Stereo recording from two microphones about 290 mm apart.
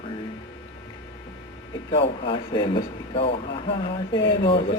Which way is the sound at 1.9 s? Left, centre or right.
Centre.